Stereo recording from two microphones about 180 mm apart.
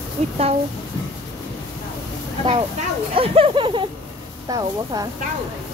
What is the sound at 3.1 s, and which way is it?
A woman's voice, 30° right (ahead or behind).